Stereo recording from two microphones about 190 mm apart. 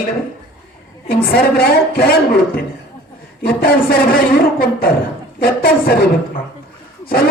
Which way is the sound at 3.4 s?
50° left (ahead or behind).